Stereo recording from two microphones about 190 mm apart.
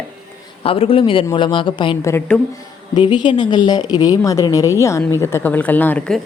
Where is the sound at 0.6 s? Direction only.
30° left (ahead or behind).